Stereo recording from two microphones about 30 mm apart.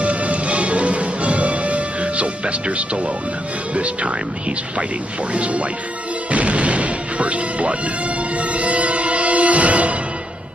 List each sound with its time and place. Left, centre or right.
0.0 s music: right
3.7 s speech: right
5.3 s speech: right
6.3 s music: right